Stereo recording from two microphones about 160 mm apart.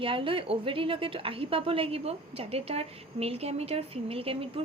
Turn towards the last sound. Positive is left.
turn(degrees=-35)  # may be behind; listen again after turning